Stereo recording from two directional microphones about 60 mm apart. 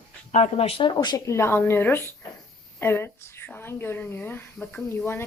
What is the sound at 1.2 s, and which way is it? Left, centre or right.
Speech, left.